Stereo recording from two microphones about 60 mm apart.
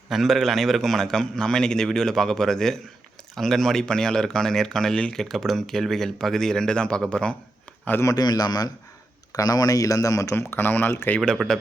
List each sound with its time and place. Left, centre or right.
0.1 s a man's voice: centre
8.0 s a man's voice: left
10.3 s a man's voice: left
11.4 s a man's voice: centre